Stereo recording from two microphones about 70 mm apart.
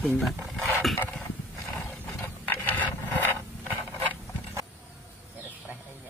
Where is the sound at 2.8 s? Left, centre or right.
Left.